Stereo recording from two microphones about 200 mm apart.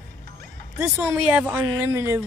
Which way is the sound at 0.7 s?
10° right (ahead or behind).